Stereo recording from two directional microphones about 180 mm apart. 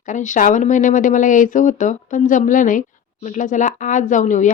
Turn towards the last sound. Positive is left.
turn(degrees=45)  # may be behind; listen again after turning